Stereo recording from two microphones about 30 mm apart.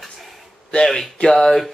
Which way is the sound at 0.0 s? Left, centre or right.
Centre.